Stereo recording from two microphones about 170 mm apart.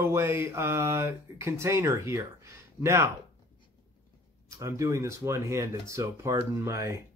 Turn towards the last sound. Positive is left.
turn(degrees=-15)  # may be behind; listen again after turning